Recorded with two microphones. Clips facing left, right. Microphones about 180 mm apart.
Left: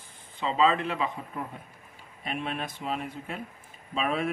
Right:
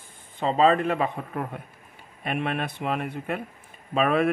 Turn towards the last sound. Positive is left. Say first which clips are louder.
# right 7 dB
turn(degrees=-60)  # may be behind; listen again after turning